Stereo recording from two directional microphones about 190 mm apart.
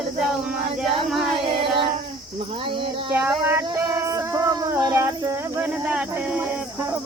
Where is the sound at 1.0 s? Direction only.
Centre (ahead or behind).